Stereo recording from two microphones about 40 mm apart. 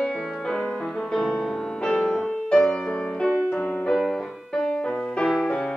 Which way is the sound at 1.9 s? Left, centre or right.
Centre.